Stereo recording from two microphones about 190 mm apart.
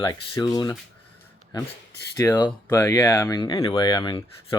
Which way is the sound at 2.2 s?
15° left (ahead or behind).